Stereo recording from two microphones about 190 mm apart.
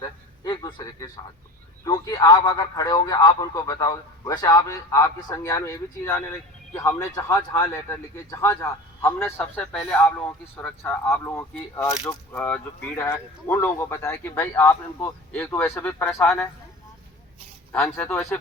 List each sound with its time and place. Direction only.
0.4 s a man's voice: 20° left (ahead or behind)
17.7 s speech: 10° left (ahead or behind)